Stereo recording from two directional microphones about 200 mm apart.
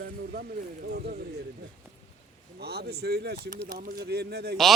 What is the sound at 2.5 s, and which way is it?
Speech, 55° right (ahead or behind).